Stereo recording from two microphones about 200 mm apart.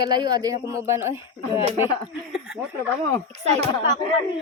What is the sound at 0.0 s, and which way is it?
A man's voice, 20° right (ahead or behind).